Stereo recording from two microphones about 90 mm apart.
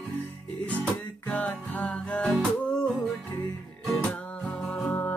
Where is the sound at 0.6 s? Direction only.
15° left (ahead or behind).